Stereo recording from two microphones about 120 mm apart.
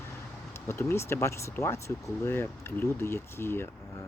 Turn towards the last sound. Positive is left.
turn(degrees=20)  # may be behind; listen again after turning